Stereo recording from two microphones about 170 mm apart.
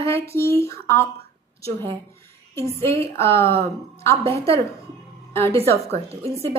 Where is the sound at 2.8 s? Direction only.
15° left (ahead or behind).